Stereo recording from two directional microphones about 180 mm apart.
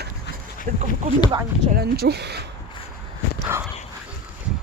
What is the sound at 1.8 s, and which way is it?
Speech, 65° right (ahead or behind).